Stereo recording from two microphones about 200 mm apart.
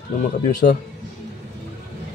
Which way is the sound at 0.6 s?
40° left (ahead or behind).